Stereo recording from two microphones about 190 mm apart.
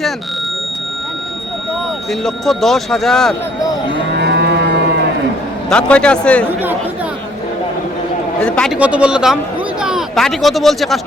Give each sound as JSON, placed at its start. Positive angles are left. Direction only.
{"t": 2.2, "sound": "speech", "side_deg": 0}
{"t": 4.2, "sound": "moo", "side_deg": -65}
{"t": 5.6, "sound": "speech", "side_deg": 5}
{"t": 8.4, "sound": "speech", "side_deg": 5}